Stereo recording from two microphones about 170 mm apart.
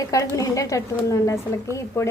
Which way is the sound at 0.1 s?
20° left (ahead or behind).